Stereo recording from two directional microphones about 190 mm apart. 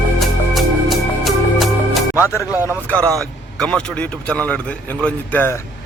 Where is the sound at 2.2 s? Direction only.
15° left (ahead or behind).